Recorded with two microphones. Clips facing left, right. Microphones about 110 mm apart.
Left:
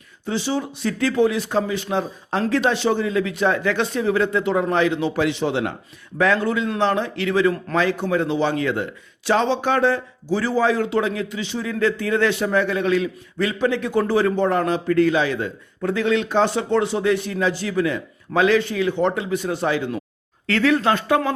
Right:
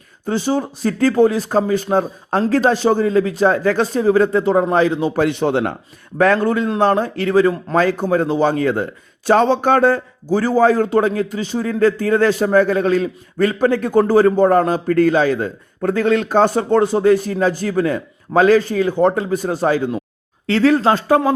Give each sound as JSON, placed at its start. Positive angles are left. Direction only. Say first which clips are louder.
{"t": 0.3, "sound": "speech", "louder": "right 5 dB", "side_deg": -45}